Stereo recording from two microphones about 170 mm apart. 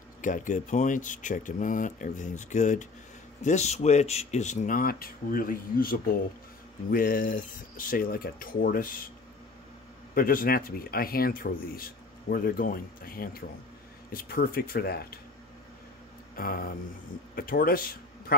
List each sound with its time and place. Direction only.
0.2 s speech: 50° left (ahead or behind)
10.1 s speech: 60° left (ahead or behind)
16.3 s speech: 60° left (ahead or behind)